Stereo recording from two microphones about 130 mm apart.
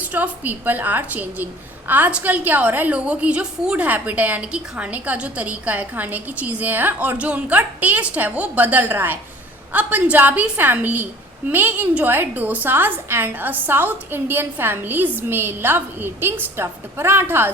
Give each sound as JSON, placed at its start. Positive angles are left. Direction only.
{"t": 0.0, "sound": "a woman's voice", "side_deg": -15}